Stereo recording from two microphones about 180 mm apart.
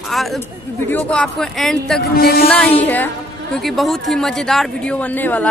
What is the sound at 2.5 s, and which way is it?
A woman's voice, 5° left (ahead or behind).